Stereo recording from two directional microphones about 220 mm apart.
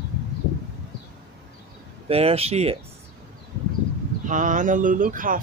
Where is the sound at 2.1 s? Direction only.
25° right (ahead or behind).